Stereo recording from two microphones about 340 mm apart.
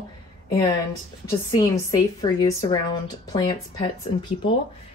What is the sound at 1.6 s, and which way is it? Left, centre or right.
Speech, centre.